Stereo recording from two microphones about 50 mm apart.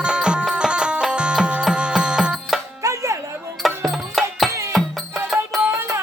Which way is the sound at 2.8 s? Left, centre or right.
Right.